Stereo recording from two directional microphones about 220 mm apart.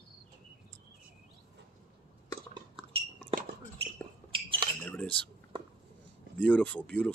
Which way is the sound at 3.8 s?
25° right (ahead or behind).